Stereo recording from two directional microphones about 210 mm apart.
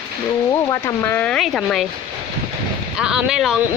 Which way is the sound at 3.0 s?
5° right (ahead or behind).